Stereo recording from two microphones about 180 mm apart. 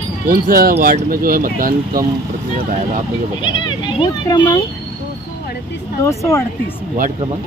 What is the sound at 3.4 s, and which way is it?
A child's voice, 25° left (ahead or behind).